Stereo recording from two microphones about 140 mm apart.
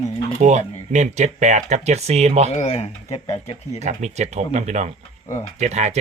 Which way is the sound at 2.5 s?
50° left (ahead or behind).